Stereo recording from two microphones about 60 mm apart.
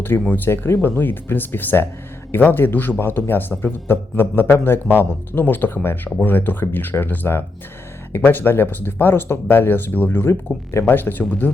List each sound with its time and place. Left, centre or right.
0.0 s speech: left